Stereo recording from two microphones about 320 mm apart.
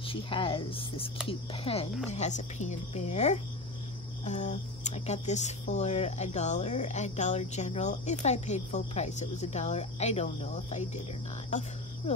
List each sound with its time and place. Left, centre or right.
0.0 s speech: centre